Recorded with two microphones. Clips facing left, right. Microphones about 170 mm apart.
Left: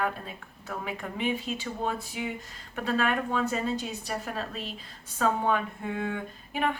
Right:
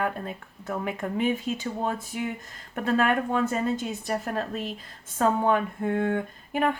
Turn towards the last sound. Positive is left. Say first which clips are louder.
# right 4 dB
turn(degrees=-50)  # may be behind; listen again after turning